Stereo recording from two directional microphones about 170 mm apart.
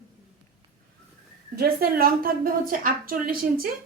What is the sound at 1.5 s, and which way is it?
A woman's voice, 65° right (ahead or behind).